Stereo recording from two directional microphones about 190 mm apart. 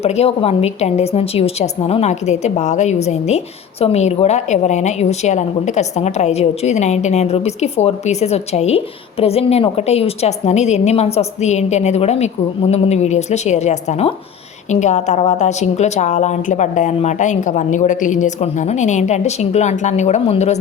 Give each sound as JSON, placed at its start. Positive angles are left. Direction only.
{"t": 0.0, "sound": "a woman's voice", "side_deg": 30}